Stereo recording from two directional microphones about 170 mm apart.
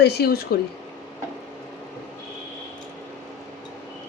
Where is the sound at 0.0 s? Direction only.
70° left (ahead or behind).